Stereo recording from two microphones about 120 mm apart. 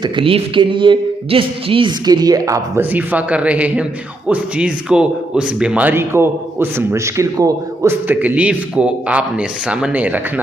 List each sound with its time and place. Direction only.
0.0 s speech: 45° right (ahead or behind); by 2.8 s 30° right (ahead or behind)
2.9 s speech: 15° right (ahead or behind)